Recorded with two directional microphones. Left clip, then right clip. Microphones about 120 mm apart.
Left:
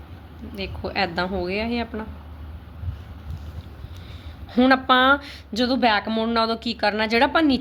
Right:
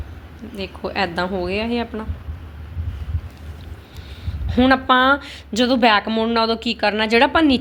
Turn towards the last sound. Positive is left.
turn(degrees=-5)  # may be behind; listen again after turning